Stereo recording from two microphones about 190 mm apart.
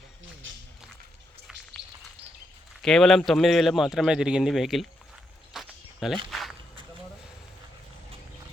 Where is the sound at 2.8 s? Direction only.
Centre (ahead or behind).